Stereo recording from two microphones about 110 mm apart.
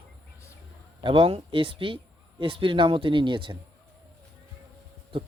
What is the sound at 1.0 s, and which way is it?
Speech, 55° right (ahead or behind).